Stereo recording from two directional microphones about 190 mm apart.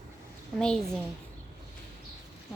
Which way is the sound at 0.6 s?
5° left (ahead or behind).